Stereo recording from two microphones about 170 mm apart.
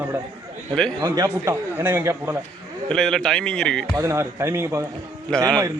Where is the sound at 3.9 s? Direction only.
15° right (ahead or behind).